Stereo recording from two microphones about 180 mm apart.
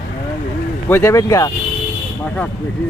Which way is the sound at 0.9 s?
15° left (ahead or behind).